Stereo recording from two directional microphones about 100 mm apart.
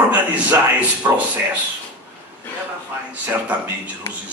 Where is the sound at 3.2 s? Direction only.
20° right (ahead or behind).